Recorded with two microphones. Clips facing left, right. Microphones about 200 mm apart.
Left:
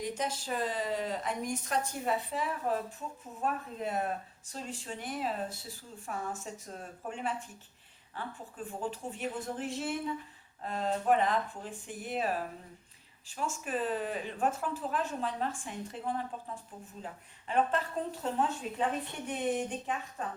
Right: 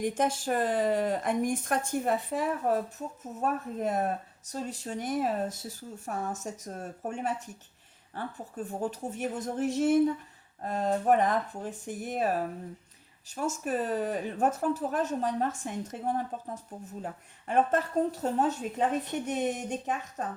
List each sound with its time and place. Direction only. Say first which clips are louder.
0.0 s speech: right 7 dB; 50° right (ahead or behind)